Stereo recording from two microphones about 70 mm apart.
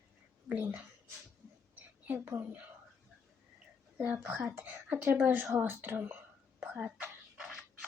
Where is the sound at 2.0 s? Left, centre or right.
Right.